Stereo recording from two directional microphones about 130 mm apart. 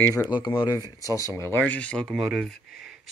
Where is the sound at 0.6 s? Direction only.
30° left (ahead or behind).